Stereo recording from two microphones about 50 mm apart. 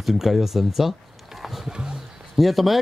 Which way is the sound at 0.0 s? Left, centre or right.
Centre.